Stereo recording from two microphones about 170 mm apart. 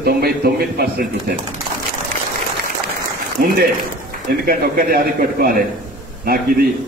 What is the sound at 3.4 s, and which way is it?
A man's voice, 60° right (ahead or behind).